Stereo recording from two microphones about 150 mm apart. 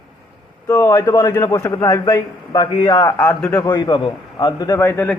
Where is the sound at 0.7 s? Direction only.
20° left (ahead or behind).